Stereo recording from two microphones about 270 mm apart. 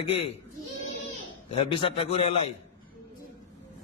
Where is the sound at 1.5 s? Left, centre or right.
Left.